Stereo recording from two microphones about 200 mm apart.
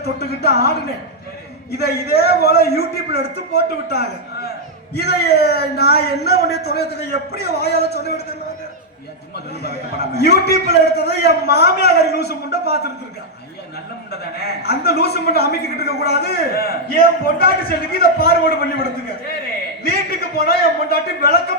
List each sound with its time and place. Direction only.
0.0 s a man's voice: 50° left (ahead or behind)
1.7 s a man's voice: 55° left (ahead or behind)
10.2 s a man's voice: 55° left (ahead or behind)
14.1 s a man's voice: 55° left (ahead or behind)